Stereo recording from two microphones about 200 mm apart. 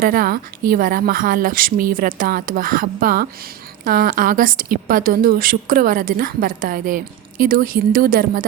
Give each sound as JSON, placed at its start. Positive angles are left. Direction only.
{"t": 0.0, "sound": "a woman's voice", "side_deg": -45}